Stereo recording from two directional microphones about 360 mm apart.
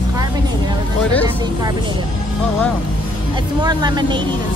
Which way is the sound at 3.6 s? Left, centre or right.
Centre.